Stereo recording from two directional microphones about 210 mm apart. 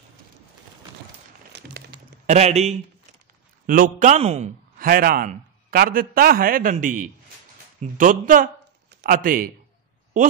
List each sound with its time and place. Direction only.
2.2 s speech: 30° right (ahead or behind)
3.6 s speech: 40° right (ahead or behind)
4.7 s a man's voice: 45° right (ahead or behind)